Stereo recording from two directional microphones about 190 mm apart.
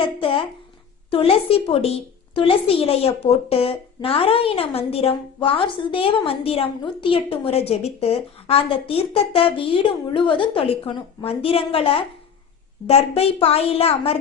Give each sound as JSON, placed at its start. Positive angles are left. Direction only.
{"t": 0.0, "sound": "a woman's voice", "side_deg": 25}